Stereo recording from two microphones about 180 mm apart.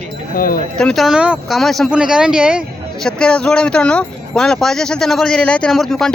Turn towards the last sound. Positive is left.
turn(degrees=0)  # may be behind; listen again after turning